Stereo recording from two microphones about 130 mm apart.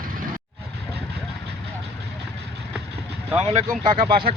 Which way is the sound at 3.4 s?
55° right (ahead or behind).